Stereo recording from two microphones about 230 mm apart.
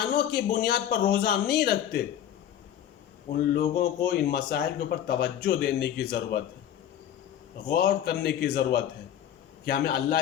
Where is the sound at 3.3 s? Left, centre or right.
Left.